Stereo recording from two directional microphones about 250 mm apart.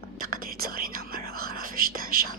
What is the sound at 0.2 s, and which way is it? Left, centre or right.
Whispering, right.